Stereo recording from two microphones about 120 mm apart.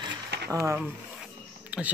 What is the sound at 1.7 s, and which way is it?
Speech, 10° right (ahead or behind).